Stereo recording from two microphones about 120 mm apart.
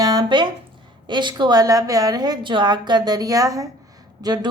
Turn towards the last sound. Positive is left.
turn(degrees=-35)  # may be behind; listen again after turning